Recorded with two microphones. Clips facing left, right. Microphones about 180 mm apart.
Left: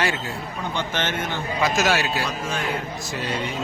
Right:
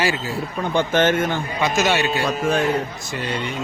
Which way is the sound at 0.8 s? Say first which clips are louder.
Right 10 dB; 50° right (ahead or behind).